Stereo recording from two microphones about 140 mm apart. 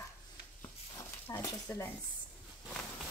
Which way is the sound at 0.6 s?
20° left (ahead or behind).